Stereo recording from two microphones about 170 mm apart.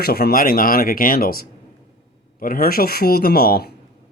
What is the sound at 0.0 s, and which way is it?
Speech, 65° left (ahead or behind).